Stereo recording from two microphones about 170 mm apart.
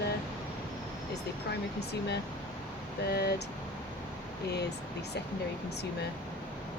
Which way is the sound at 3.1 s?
75° left (ahead or behind).